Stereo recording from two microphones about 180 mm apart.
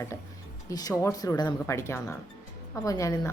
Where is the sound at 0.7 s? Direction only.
20° left (ahead or behind).